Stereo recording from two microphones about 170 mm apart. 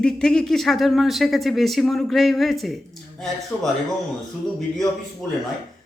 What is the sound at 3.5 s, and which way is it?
Speech, 5° left (ahead or behind).